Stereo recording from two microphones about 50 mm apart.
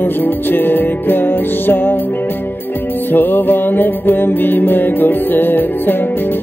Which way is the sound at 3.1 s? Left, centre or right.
Left.